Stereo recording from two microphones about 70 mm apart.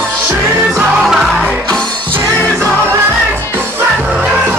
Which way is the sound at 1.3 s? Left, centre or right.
Centre.